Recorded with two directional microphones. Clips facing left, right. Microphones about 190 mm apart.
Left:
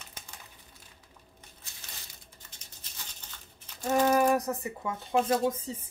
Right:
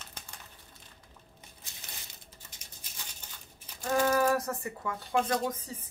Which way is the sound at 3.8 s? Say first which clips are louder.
Left 2 dB; 20° left (ahead or behind).